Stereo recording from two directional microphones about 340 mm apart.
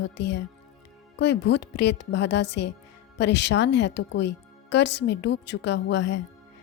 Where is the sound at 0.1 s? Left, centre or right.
Left.